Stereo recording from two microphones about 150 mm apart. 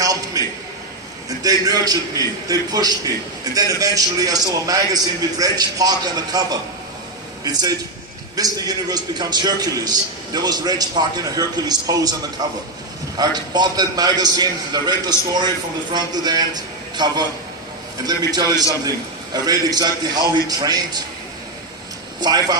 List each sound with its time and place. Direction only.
0.0 s a sound: 25° right (ahead or behind)
1.4 s a man's voice: 25° right (ahead or behind)
13.2 s a man's voice: 25° right (ahead or behind)
22.2 s a man's voice: 25° right (ahead or behind)